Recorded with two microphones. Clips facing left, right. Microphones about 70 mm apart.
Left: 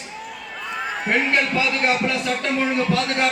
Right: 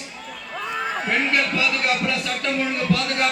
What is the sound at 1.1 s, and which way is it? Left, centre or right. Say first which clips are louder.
A man's voice: left 3 dB; left.